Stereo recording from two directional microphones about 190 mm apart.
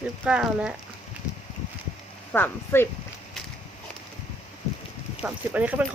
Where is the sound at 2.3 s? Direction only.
10° left (ahead or behind).